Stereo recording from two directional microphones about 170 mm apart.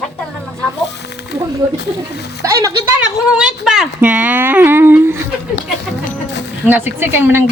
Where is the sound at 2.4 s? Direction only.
20° right (ahead or behind).